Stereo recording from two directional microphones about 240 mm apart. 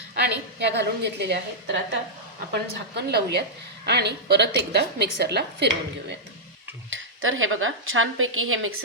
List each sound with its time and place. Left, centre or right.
0.1 s a woman's voice: right